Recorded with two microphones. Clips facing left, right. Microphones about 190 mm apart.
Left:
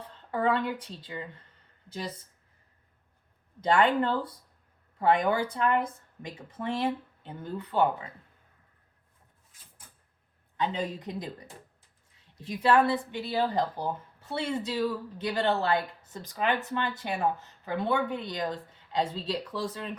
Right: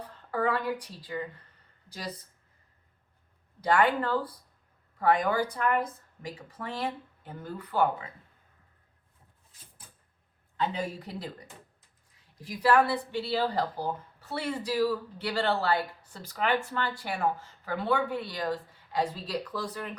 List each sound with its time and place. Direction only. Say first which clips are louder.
0.3 s a woman's voice: left 1 dB; 25° left (ahead or behind)
3.6 s speech: left 1 dB; 25° left (ahead or behind)
10.6 s speech: left 1 dB; 20° left (ahead or behind)